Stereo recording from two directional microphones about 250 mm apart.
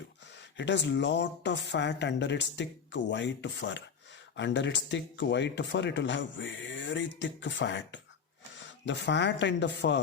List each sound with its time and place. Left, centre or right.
0.5 s speech: left